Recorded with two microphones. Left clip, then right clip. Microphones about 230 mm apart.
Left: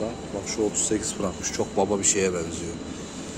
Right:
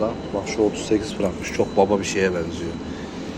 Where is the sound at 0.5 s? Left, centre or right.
Left.